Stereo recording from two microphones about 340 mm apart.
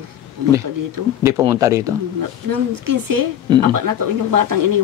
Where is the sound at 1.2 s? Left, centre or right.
Centre.